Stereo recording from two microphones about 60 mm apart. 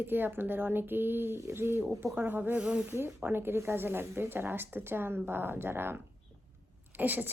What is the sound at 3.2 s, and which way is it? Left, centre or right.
A woman's voice, right.